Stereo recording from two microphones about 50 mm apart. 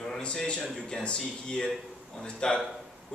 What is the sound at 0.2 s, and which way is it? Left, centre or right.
A man's voice, left.